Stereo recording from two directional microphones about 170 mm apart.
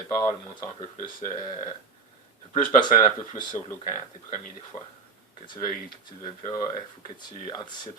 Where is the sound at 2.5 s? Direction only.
30° left (ahead or behind).